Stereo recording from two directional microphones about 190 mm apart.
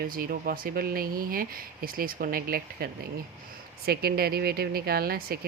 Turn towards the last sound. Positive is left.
turn(degrees=-50)  # may be behind; listen again after turning